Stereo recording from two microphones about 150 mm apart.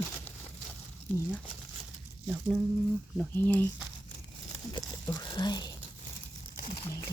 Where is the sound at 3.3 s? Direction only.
15° left (ahead or behind).